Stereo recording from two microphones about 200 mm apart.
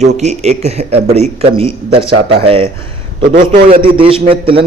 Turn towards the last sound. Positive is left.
turn(degrees=-25)  # may be behind; listen again after turning